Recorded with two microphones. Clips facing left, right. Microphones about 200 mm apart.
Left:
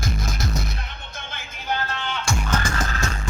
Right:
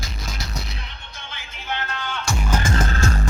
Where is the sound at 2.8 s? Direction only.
30° right (ahead or behind).